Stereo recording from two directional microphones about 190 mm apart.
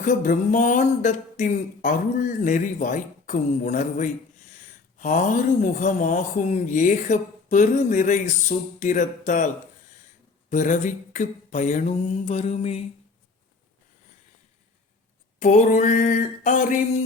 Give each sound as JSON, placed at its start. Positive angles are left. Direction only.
{"t": 0.0, "sound": "speech", "side_deg": 45}
{"t": 10.5, "sound": "speech", "side_deg": 40}
{"t": 15.4, "sound": "speech", "side_deg": 40}